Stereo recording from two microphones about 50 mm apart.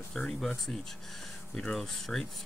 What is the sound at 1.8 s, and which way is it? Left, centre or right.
Speech, centre.